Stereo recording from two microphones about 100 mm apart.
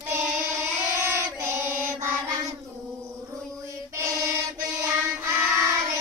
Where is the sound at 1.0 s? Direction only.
25° right (ahead or behind).